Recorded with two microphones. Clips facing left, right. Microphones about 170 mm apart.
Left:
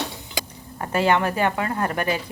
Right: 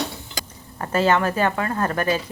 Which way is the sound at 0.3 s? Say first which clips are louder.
Left 4 dB; 15° left (ahead or behind).